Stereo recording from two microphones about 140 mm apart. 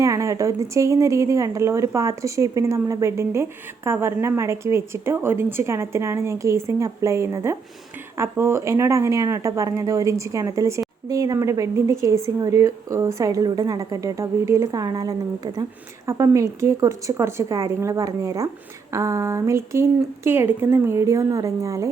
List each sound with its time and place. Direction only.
0.0 s a woman's voice: 20° right (ahead or behind)